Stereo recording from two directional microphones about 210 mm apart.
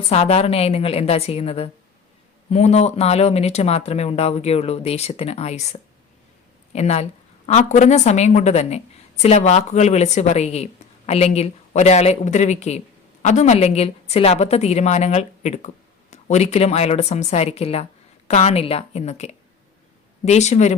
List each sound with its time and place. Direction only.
0.1 s a woman's voice: 30° left (ahead or behind)
6.7 s a woman's voice: 30° left (ahead or behind)